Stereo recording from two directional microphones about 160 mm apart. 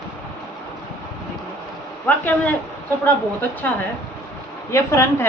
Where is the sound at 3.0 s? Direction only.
10° left (ahead or behind).